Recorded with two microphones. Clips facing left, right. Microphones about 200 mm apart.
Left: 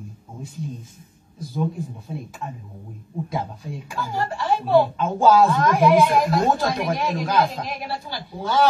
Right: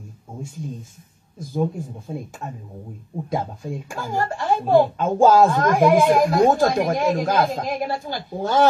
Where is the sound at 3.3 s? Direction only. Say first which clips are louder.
Right 5 dB; 50° right (ahead or behind).